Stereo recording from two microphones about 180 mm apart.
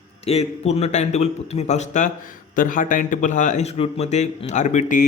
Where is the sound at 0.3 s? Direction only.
35° left (ahead or behind).